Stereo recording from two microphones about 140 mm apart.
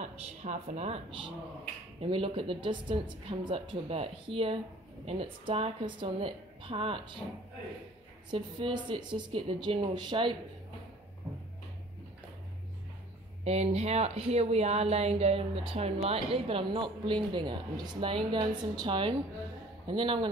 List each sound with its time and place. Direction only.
0.0 s a woman's voice: 55° right (ahead or behind)
8.3 s a woman's voice: 35° right (ahead or behind)
13.4 s a woman's voice: 50° right (ahead or behind); by 20.2 s 35° right (ahead or behind)